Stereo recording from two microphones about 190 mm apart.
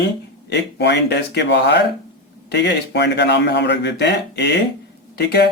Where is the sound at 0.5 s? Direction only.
65° left (ahead or behind).